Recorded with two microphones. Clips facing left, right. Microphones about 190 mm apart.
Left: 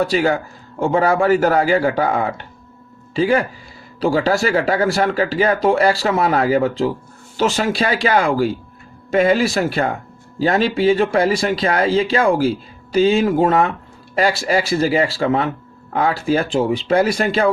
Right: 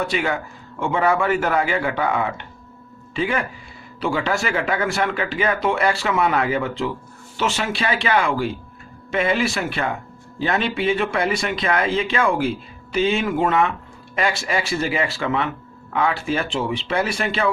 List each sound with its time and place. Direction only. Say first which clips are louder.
0.0 s speech: left 6 dB; 35° left (ahead or behind)